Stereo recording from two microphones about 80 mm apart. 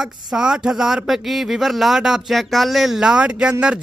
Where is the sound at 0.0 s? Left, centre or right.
Centre.